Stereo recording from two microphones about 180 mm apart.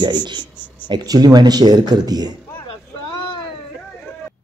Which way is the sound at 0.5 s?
10° left (ahead or behind).